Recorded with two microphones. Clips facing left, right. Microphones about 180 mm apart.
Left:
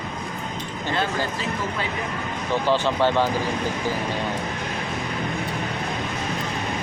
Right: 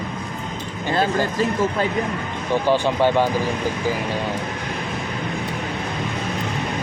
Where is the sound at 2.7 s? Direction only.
15° right (ahead or behind).